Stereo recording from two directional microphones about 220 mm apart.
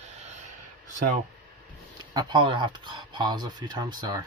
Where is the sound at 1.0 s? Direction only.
35° right (ahead or behind).